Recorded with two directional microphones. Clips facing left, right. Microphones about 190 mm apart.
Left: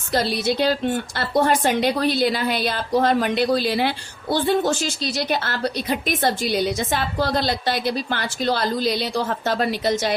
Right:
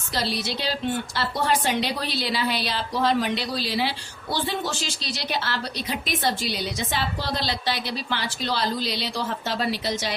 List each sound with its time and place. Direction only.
0.1 s a woman's voice: 50° left (ahead or behind)